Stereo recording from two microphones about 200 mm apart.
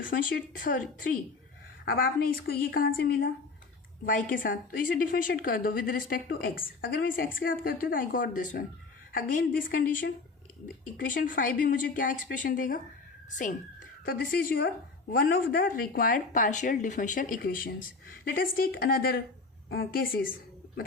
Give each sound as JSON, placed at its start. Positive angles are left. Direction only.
{"t": 0.1, "sound": "a woman's voice", "side_deg": 45}